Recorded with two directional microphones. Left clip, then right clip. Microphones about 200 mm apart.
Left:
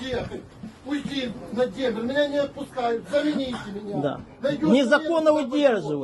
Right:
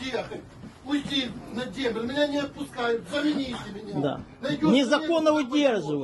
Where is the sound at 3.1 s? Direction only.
5° right (ahead or behind).